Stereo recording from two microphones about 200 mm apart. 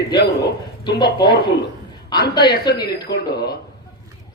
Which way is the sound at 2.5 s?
50° left (ahead or behind).